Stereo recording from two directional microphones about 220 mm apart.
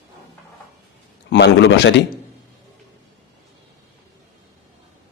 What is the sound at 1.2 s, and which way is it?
Speech, 55° left (ahead or behind).